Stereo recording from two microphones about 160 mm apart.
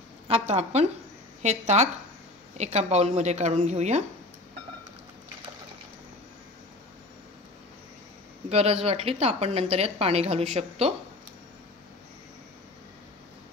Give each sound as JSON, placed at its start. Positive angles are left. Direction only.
{"t": 0.3, "sound": "speech", "side_deg": -45}
{"t": 8.5, "sound": "a woman's voice", "side_deg": -40}